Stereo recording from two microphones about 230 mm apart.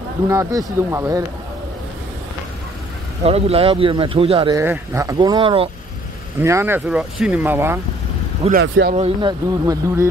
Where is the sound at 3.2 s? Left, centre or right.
Right.